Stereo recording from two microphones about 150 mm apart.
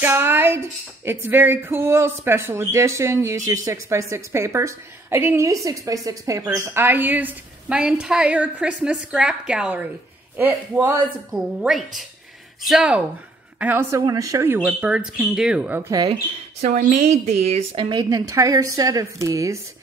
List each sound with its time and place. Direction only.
0.0 s music: 15° right (ahead or behind)
12.6 s speech: 5° right (ahead or behind)
13.6 s music: 15° right (ahead or behind)
15.9 s a woman's voice: 25° right (ahead or behind)
16.7 s a woman's voice: 50° right (ahead or behind); by 19.6 s 20° right (ahead or behind)